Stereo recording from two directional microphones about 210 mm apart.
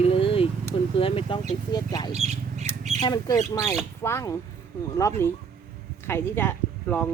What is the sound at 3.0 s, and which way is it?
Speech, 20° left (ahead or behind).